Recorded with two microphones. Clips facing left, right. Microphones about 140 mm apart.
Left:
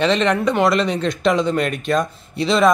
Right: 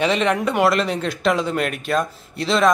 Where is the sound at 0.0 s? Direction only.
10° right (ahead or behind).